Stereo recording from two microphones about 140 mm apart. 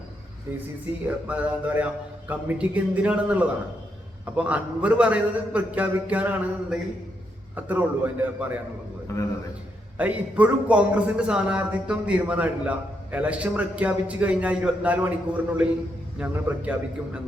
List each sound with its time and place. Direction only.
1.0 s a man's voice: 10° right (ahead or behind)
9.1 s a man's voice: 20° left (ahead or behind)
10.0 s a man's voice: 10° right (ahead or behind)